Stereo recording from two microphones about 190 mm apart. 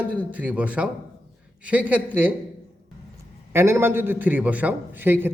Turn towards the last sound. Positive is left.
turn(degrees=-10)  # may be behind; listen again after turning